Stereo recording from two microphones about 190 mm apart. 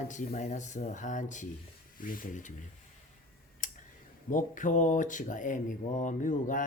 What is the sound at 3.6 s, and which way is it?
Tick, 45° left (ahead or behind).